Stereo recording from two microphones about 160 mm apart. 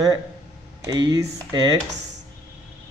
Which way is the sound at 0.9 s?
25° right (ahead or behind).